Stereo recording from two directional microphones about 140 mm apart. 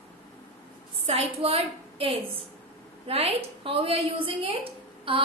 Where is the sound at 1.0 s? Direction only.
45° right (ahead or behind).